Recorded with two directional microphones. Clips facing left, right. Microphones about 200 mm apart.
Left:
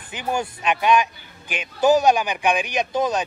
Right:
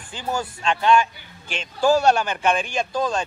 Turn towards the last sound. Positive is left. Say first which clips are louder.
# left 2 dB
turn(degrees=20)  # may be behind; listen again after turning